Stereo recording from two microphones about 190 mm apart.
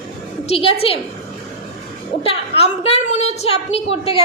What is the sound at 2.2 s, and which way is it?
A woman's voice, 30° left (ahead or behind).